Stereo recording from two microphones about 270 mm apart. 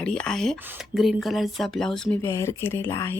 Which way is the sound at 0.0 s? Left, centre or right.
Centre.